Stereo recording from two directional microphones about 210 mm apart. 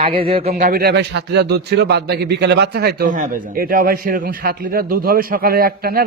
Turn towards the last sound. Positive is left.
turn(degrees=-45)  # may be behind; listen again after turning